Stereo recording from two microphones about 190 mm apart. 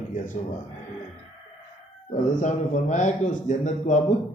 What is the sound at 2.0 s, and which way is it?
A man's voice, 40° left (ahead or behind).